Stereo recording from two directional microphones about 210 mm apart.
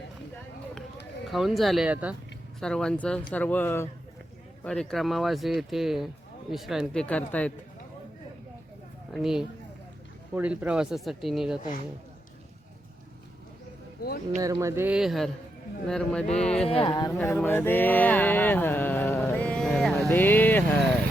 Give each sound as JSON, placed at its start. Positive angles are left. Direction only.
{"t": 1.3, "sound": "speech", "side_deg": 0}
{"t": 9.1, "sound": "speech", "side_deg": 0}
{"t": 14.4, "sound": "speech", "side_deg": -15}
{"t": 16.6, "sound": "speech", "side_deg": 25}
{"t": 17.2, "sound": "a sound", "side_deg": 10}
{"t": 20.1, "sound": "speech", "side_deg": 10}